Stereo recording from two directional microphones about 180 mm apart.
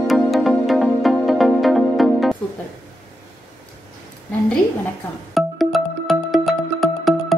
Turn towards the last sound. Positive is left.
turn(degrees=0)  # may be behind; listen again after turning